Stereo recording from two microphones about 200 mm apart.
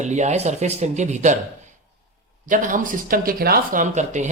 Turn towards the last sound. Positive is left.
turn(degrees=-35)  # may be behind; listen again after turning